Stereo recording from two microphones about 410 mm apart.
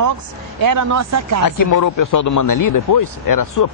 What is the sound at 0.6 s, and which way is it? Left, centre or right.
Speech, right.